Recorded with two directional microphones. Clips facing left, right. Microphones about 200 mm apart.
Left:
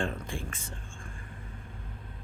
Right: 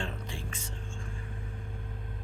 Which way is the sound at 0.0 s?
50° left (ahead or behind).